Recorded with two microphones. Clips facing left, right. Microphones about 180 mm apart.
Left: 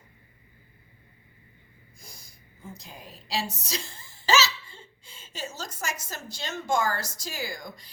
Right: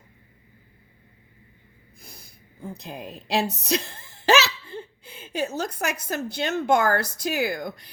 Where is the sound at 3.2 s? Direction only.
60° right (ahead or behind).